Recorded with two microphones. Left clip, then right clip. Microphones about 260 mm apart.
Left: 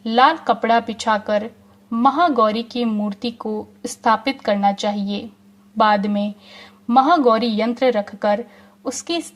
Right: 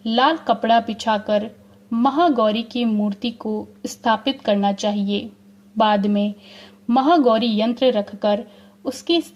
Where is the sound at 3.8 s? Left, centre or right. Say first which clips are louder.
Left 3 dB; left.